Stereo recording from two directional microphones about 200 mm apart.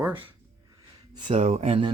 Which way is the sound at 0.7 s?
20° right (ahead or behind).